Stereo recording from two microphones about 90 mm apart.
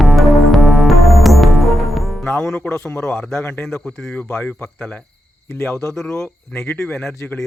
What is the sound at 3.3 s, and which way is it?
A man's voice, 25° left (ahead or behind).